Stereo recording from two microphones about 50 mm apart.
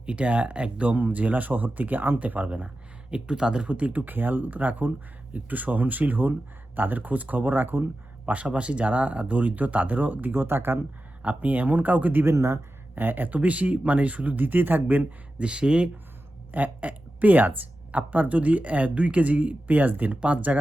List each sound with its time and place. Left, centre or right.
0.0 s speech: right
3.1 s speech: centre; by 7.9 s right
8.3 s speech: right
11.2 s speech: right
12.2 s speech: right
13.0 s speech: right
15.4 s speech: right
16.5 s speech: right